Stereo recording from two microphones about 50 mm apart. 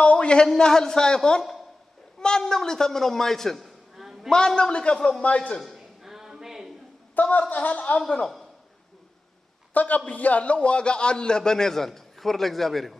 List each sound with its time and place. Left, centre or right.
0.0 s a sound: left
0.6 s a man's voice: centre
4.3 s a man's voice: centre
5.6 s a sound: centre
7.2 s speech: left
9.8 s a man's voice: left; by 12.9 s centre